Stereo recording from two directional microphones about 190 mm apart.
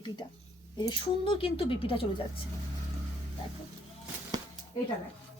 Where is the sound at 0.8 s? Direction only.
25° left (ahead or behind).